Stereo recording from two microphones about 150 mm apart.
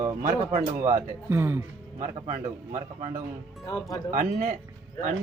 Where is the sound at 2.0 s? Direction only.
50° right (ahead or behind).